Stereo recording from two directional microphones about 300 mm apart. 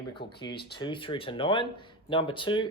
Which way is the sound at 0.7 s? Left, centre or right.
Centre.